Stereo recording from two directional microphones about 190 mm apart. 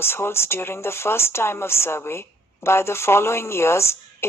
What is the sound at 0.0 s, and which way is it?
A woman's voice, 15° left (ahead or behind).